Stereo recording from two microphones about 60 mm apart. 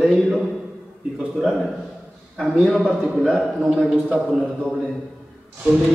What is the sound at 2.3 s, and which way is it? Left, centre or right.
Speech, centre.